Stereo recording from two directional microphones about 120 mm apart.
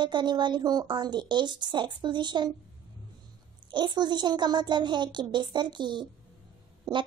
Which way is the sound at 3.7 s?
40° right (ahead or behind).